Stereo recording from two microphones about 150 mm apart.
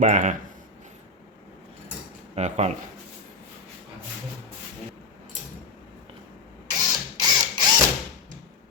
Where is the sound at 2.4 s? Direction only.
50° right (ahead or behind).